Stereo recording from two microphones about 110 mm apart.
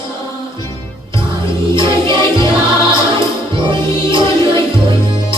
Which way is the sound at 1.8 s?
50° right (ahead or behind).